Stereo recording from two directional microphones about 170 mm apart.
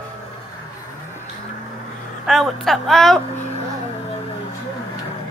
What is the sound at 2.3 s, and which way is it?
Speech, centre (ahead or behind).